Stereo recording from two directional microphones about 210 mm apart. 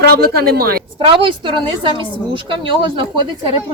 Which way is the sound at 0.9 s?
25° right (ahead or behind).